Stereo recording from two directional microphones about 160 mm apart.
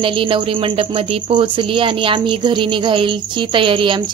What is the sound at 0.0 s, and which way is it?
Speech, 30° right (ahead or behind).